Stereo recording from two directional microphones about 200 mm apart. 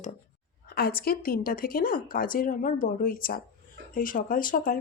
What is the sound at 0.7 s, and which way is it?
A woman's voice, 50° left (ahead or behind).